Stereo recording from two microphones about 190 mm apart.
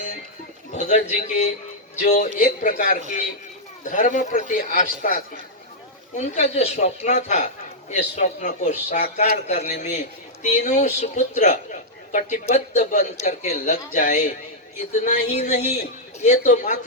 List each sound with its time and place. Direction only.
0.7 s a man's voice: 40° left (ahead or behind)